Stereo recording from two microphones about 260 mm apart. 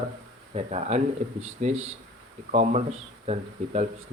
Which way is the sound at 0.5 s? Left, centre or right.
Right.